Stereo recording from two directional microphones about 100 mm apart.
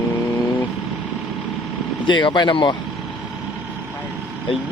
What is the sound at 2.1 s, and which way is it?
Speech, 50° left (ahead or behind).